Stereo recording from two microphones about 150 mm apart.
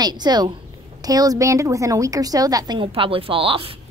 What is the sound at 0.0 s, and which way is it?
A woman's voice, 30° right (ahead or behind).